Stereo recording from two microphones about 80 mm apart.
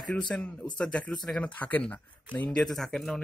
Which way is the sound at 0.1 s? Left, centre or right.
Centre.